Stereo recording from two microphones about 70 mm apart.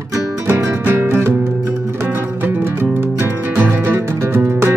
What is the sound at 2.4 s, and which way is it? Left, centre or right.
Music, right.